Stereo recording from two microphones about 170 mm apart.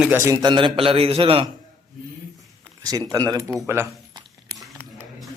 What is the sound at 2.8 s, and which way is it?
Speech, 20° right (ahead or behind).